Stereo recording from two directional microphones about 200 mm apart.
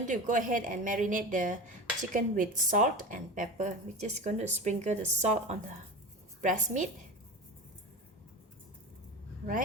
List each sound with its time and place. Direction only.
0.0 s speech: 40° right (ahead or behind)